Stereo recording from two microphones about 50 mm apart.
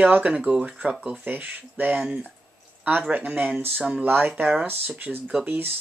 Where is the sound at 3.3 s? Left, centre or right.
Right.